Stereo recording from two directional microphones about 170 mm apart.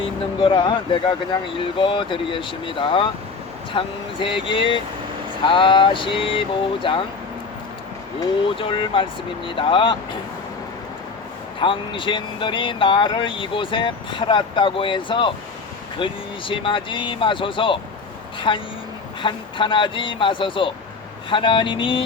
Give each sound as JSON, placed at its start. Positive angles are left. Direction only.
{"t": 0.3, "sound": "speech", "side_deg": 30}
{"t": 8.2, "sound": "speech", "side_deg": 30}
{"t": 11.6, "sound": "speech", "side_deg": 30}